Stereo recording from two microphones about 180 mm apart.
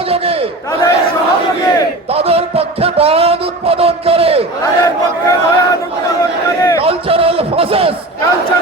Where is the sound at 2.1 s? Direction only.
35° right (ahead or behind).